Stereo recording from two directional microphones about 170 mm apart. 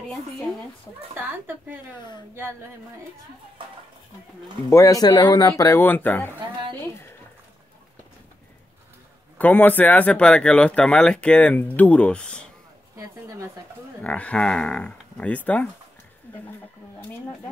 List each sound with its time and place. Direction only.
1.1 s speech: 10° right (ahead or behind)
4.6 s speech: 20° left (ahead or behind)
9.4 s speech: 10° left (ahead or behind)
12.9 s a woman's voice: 20° right (ahead or behind)
14.0 s speech: 5° left (ahead or behind)